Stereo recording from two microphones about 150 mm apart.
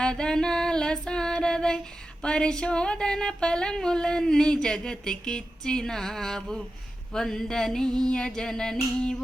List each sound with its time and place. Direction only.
0.0 s female singing: 5° left (ahead or behind)